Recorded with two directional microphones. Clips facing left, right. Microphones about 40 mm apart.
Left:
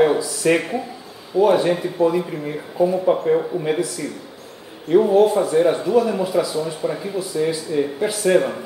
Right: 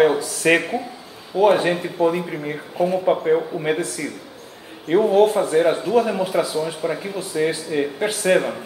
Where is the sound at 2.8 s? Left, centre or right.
Right.